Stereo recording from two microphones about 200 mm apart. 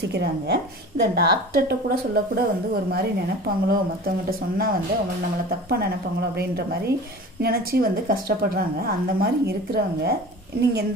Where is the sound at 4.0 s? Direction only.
45° right (ahead or behind).